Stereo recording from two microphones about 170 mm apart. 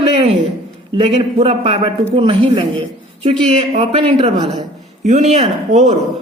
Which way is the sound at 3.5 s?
35° right (ahead or behind).